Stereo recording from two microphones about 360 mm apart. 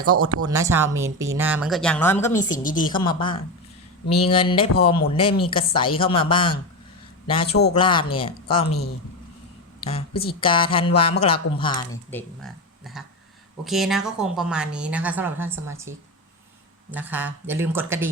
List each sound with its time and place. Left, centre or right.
0.0 s speech: right
0.4 s speech: centre
2.4 s a woman's voice: left
4.0 s mantra: left
4.3 s speech: centre
10.4 s a woman's voice: centre